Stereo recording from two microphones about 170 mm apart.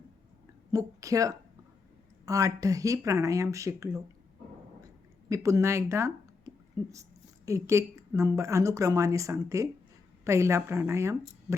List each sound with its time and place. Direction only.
0.7 s speech: 20° right (ahead or behind)
5.3 s a woman's voice: 20° right (ahead or behind)